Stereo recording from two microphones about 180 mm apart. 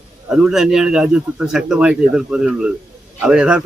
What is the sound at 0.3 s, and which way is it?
Speech, 5° right (ahead or behind).